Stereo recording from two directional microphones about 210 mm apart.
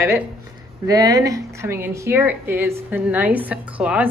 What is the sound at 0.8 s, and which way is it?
Speech, 15° right (ahead or behind).